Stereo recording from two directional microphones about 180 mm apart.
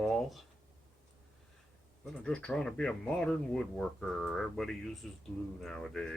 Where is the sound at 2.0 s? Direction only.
5° left (ahead or behind).